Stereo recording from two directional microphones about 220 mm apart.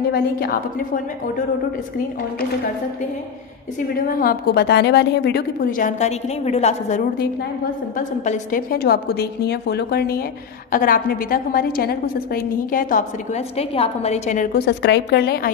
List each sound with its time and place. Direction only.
0.1 s a woman's voice: 45° left (ahead or behind)
3.9 s a woman's voice: 40° left (ahead or behind)
8.3 s a woman's voice: 40° left (ahead or behind)